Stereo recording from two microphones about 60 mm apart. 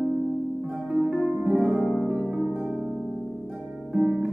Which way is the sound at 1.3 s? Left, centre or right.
Right.